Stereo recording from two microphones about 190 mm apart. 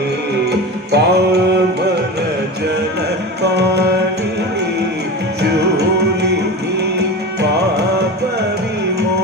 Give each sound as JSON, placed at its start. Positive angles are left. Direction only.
{"t": 0.9, "sound": "music", "side_deg": -60}
{"t": 3.4, "sound": "music", "side_deg": -60}
{"t": 5.4, "sound": "music", "side_deg": -60}